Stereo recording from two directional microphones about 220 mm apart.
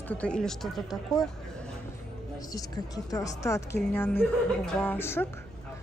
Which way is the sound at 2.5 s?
15° left (ahead or behind).